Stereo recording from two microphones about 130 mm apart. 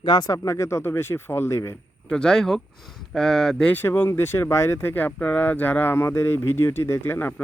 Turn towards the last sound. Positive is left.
turn(degrees=15)  # may be behind; listen again after turning